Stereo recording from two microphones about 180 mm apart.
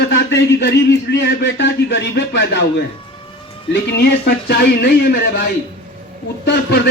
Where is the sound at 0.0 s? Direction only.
75° left (ahead or behind).